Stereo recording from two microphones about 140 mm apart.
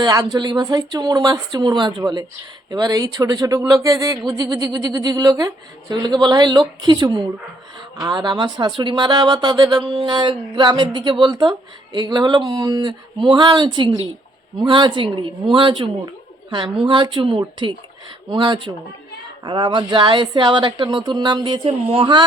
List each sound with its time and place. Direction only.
0.0 s speech: 25° right (ahead or behind)